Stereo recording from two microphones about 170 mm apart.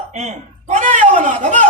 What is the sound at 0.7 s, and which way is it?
Speech, 50° right (ahead or behind).